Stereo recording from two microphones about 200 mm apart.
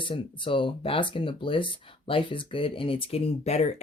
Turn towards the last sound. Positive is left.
turn(degrees=35)  # may be behind; listen again after turning